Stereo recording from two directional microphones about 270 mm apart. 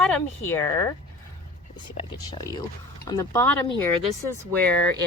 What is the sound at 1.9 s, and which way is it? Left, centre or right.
Speech, centre.